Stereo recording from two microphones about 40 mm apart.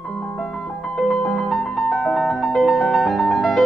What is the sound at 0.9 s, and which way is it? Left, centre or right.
Music, centre.